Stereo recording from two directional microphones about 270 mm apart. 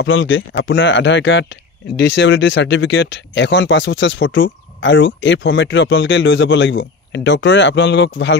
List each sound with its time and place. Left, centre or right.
0.0 s speech: left